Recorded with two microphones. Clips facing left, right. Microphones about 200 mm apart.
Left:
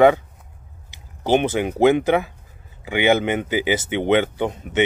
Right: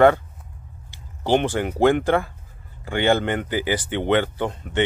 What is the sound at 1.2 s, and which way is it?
Speech, 20° left (ahead or behind).